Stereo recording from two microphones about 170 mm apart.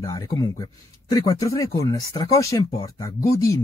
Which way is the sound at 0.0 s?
20° left (ahead or behind).